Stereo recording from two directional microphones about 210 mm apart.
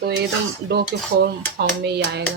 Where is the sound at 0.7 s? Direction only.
50° right (ahead or behind).